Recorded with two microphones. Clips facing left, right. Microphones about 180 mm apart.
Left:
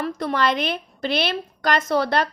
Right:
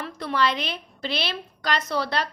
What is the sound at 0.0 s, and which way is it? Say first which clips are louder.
A woman's voice: left 3 dB; 45° left (ahead or behind).